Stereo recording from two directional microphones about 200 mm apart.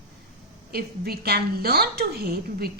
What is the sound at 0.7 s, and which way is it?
A woman's voice, 50° right (ahead or behind).